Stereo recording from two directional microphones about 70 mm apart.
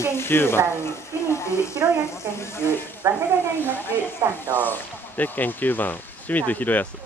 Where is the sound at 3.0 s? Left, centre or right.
Right.